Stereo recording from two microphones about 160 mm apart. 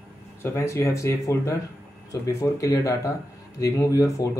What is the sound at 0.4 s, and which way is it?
Speech, 15° left (ahead or behind).